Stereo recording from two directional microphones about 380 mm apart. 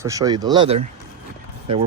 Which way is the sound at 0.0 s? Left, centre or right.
Centre.